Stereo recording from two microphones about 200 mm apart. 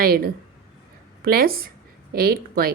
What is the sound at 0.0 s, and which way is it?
A woman's voice, 50° right (ahead or behind).